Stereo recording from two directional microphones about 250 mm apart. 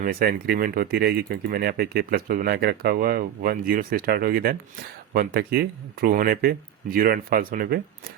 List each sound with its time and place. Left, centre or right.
0.0 s speech: right